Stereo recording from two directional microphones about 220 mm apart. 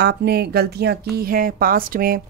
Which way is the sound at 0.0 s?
45° right (ahead or behind).